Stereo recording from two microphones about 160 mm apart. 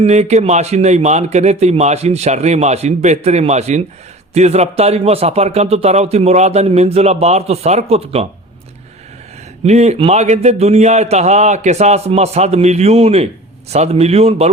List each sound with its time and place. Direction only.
0.0 s a man's voice: 45° right (ahead or behind)
9.6 s a man's voice: 45° right (ahead or behind)